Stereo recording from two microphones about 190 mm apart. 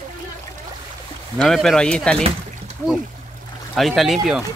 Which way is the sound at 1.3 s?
Centre (ahead or behind).